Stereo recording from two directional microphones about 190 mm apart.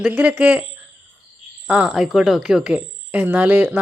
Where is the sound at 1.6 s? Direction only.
5° right (ahead or behind).